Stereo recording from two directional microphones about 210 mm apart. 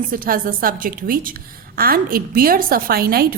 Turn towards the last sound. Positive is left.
turn(degrees=-45)  # may be behind; listen again after turning